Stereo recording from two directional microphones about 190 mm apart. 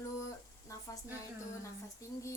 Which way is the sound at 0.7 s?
15° left (ahead or behind).